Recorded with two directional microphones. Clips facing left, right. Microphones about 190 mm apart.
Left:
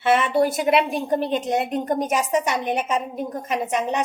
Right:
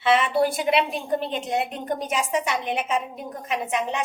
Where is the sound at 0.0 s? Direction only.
50° left (ahead or behind).